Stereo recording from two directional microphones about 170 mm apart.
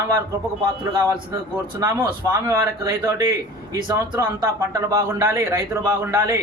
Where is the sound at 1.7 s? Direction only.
20° right (ahead or behind).